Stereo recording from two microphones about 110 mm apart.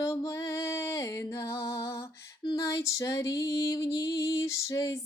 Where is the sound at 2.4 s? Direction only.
35° left (ahead or behind).